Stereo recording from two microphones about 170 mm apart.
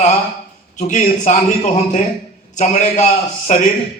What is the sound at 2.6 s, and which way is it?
A man's voice, 45° left (ahead or behind).